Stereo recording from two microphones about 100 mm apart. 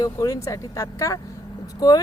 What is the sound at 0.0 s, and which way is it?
Speech, 35° left (ahead or behind).